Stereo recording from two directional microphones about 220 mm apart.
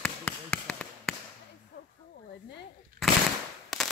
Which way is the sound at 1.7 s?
50° left (ahead or behind).